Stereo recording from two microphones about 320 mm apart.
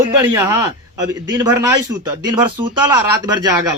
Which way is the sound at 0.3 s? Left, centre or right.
Centre.